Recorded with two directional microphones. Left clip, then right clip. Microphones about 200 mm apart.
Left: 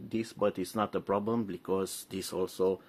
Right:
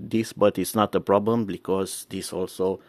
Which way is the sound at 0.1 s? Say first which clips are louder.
Right 10 dB; 55° right (ahead or behind).